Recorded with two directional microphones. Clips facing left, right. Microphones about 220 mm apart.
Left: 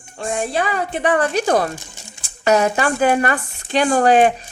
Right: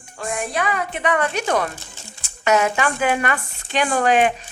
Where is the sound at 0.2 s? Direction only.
30° left (ahead or behind).